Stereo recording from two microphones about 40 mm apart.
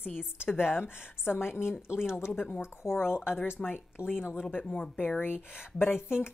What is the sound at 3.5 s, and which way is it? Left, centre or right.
Speech, left.